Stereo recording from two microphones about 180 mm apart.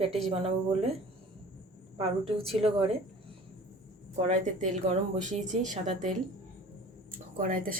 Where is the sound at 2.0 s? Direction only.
35° right (ahead or behind).